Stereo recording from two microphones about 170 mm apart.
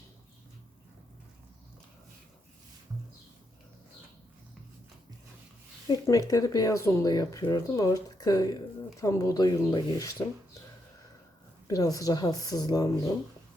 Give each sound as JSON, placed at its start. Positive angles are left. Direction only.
{"t": 5.9, "sound": "speech", "side_deg": 20}
{"t": 11.7, "sound": "speech", "side_deg": 20}